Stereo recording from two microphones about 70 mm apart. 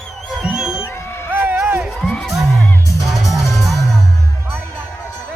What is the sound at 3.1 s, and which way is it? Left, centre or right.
Music, centre.